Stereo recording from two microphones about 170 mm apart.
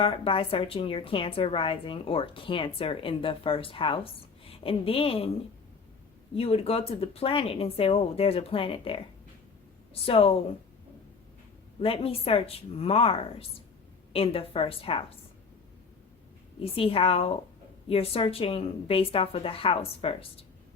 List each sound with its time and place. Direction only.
0.0 s a woman's voice: 35° left (ahead or behind)
6.3 s a woman's voice: 35° left (ahead or behind)
11.8 s a woman's voice: 35° left (ahead or behind)
16.6 s a woman's voice: 35° left (ahead or behind)